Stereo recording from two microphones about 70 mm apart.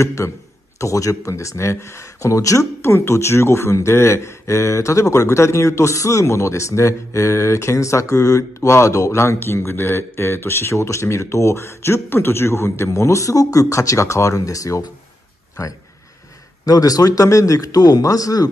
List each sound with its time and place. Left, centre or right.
0.0 s speech: left
16.6 s a man's voice: left